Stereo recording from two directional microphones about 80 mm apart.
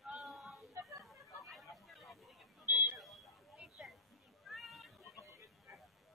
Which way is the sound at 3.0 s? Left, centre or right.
Centre.